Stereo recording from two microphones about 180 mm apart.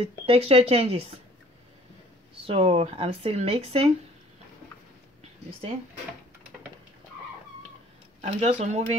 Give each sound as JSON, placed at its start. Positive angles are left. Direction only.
{"t": 0.3, "sound": "speech", "side_deg": -35}
{"t": 2.4, "sound": "speech", "side_deg": -30}
{"t": 8.2, "sound": "speech", "side_deg": -40}